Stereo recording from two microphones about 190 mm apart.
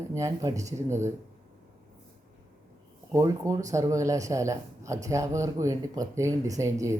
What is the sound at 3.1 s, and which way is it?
A man's voice, 15° right (ahead or behind).